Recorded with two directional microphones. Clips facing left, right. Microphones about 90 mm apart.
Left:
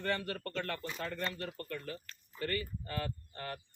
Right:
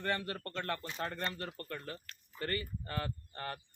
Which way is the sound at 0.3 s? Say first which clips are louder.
Even; 25° right (ahead or behind).